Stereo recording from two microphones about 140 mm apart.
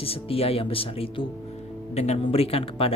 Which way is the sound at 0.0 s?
45° left (ahead or behind).